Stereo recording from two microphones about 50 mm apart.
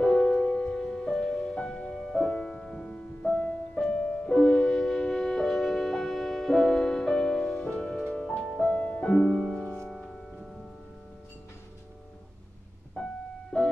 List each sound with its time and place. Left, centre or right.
0.0 s music: centre
2.0 s music: centre
3.3 s music: centre
4.4 s music: centre
8.7 s music: left
9.0 s music: centre
9.3 s music: centre
12.9 s music: centre